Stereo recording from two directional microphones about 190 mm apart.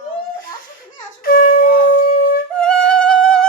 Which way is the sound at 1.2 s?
50° left (ahead or behind).